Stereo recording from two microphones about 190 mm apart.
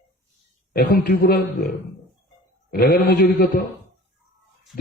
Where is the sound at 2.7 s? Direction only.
55° left (ahead or behind).